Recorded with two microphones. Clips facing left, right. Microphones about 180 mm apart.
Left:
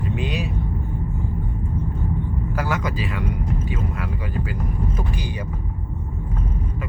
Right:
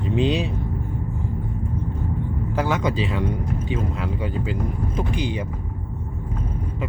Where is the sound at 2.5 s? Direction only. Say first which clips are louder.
Right 4 dB; 25° right (ahead or behind).